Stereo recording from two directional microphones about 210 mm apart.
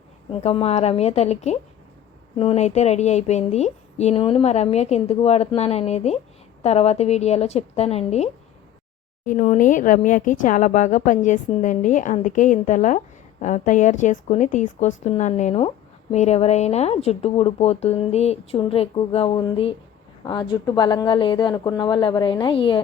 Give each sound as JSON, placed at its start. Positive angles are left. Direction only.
{"t": 0.3, "sound": "a woman's voice", "side_deg": 30}